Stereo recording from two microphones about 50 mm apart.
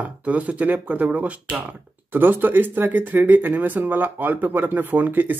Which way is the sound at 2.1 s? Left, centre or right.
Right.